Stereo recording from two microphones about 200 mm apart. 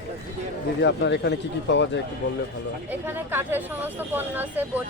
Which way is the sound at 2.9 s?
10° right (ahead or behind).